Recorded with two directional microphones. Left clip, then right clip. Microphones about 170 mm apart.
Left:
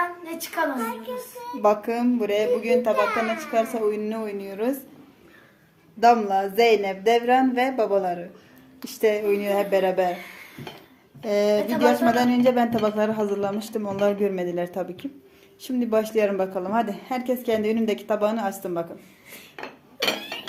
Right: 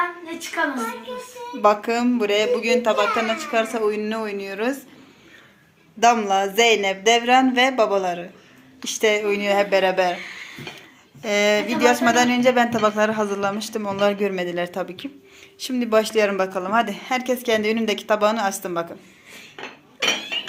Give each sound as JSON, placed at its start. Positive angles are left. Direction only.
{"t": 1.6, "sound": "speech", "side_deg": 5}
{"t": 6.0, "sound": "a woman's voice", "side_deg": 0}
{"t": 11.2, "sound": "a woman's voice", "side_deg": 10}